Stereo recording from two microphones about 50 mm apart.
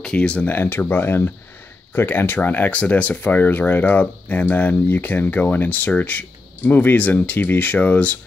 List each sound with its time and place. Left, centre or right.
0.0 s speech: left
0.5 s speech: left